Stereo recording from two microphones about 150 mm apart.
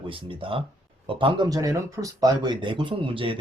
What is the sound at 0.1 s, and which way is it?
Speech, 35° right (ahead or behind).